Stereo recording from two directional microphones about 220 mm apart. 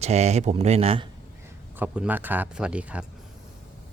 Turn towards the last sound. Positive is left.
turn(degrees=-5)  # may be behind; listen again after turning